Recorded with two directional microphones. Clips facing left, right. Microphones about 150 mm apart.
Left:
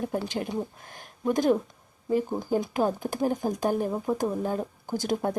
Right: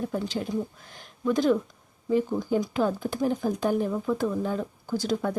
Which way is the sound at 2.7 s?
45° left (ahead or behind).